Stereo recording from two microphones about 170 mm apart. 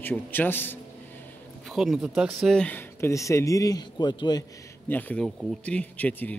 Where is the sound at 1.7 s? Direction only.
5° right (ahead or behind); by 4.4 s 25° left (ahead or behind).